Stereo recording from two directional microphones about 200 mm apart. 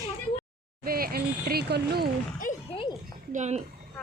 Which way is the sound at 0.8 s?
50° right (ahead or behind).